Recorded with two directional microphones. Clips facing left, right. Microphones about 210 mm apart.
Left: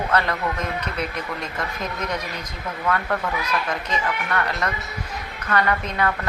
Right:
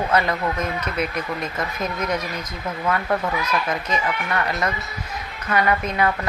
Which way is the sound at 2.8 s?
15° right (ahead or behind).